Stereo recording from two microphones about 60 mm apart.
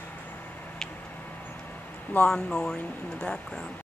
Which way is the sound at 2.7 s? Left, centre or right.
Left.